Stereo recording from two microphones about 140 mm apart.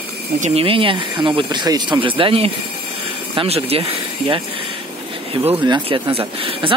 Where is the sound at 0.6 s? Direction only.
40° right (ahead or behind).